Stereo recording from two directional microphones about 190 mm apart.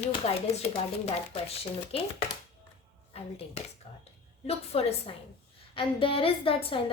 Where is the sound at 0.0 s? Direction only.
30° left (ahead or behind).